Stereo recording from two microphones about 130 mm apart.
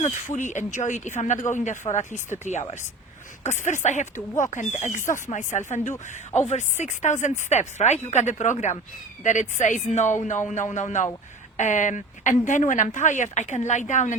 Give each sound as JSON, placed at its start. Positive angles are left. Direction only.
{"t": 0.0, "sound": "speech", "side_deg": 65}